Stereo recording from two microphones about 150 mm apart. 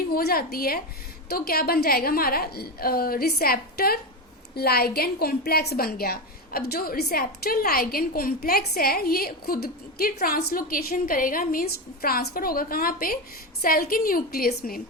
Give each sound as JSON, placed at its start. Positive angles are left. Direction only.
{"t": 0.1, "sound": "a woman's voice", "side_deg": 85}